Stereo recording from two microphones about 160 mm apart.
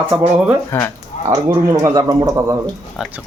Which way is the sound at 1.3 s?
20° right (ahead or behind).